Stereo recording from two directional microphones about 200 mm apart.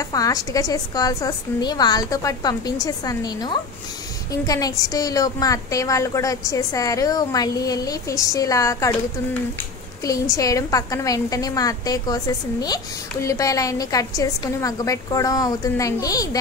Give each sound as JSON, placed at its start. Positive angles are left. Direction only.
{"t": 0.0, "sound": "a woman's voice", "side_deg": 15}
{"t": 10.3, "sound": "a woman's voice", "side_deg": 15}